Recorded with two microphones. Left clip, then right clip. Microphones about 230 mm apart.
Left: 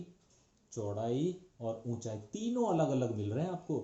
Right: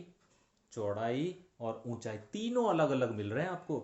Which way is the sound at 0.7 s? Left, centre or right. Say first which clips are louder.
Right 2 dB; right.